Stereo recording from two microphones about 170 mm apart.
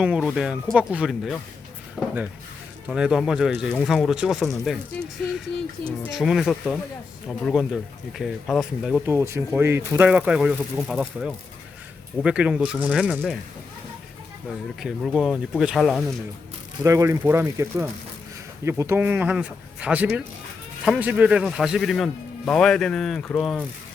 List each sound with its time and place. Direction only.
0.0 s a man's voice: 5° right (ahead or behind)
2.0 s a sound: 10° left (ahead or behind)
2.9 s a man's voice: 5° right (ahead or behind)
9.0 s a man's voice: 15° right (ahead or behind)
14.8 s a man's voice: centre (ahead or behind)
16.8 s a man's voice: 15° right (ahead or behind); by 23.6 s 5° left (ahead or behind)